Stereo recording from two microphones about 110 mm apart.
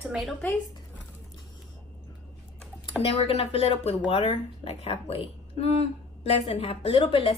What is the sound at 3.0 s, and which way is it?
A woman's voice, 60° left (ahead or behind).